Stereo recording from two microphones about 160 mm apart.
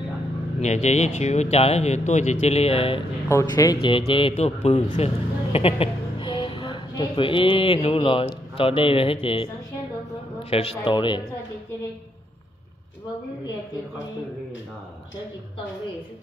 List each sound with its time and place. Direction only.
0.6 s speech: 45° left (ahead or behind)
3.3 s a man's voice: 20° left (ahead or behind)
10.5 s a man's voice: 35° left (ahead or behind)